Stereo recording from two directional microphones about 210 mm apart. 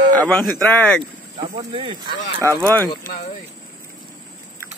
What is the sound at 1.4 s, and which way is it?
Speech, 20° right (ahead or behind).